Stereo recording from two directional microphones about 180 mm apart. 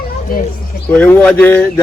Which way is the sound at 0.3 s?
50° left (ahead or behind).